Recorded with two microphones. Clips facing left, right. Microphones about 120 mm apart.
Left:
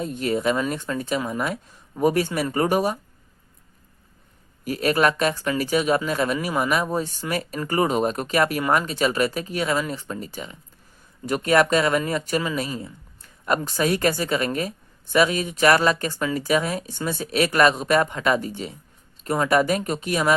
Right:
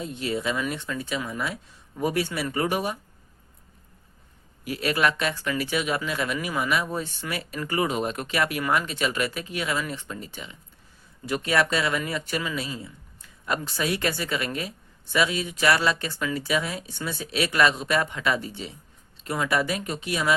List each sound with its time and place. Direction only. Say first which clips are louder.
0.0 s speech: left 5 dB; 50° left (ahead or behind)
4.6 s speech: left 4 dB; 45° left (ahead or behind)